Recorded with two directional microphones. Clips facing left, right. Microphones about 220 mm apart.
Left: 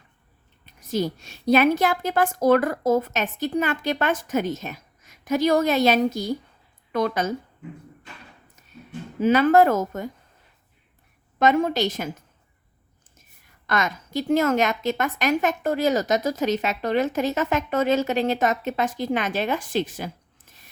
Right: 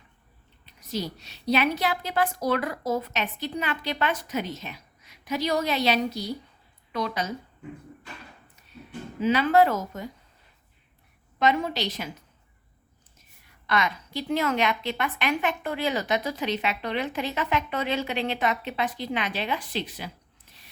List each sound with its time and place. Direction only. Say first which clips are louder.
0.6 s a woman's voice: left 7 dB; 50° left (ahead or behind)
9.2 s a woman's voice: left 4 dB; 50° left (ahead or behind)
11.3 s a woman's voice: left 5 dB; 50° left (ahead or behind)
13.7 s a woman's voice: left 2 dB; 45° left (ahead or behind)